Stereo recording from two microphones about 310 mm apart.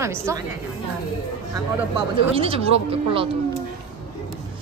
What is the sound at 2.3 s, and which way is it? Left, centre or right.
Speech, centre.